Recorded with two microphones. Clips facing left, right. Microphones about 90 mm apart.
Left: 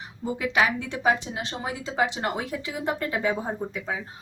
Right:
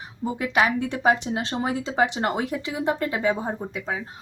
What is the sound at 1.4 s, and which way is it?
Speech, 35° right (ahead or behind).